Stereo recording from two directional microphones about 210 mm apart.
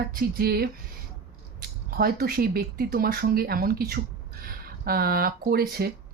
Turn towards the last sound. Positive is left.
turn(degrees=-45)  # may be behind; listen again after turning